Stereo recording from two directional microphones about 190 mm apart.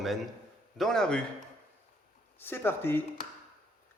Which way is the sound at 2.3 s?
10° left (ahead or behind).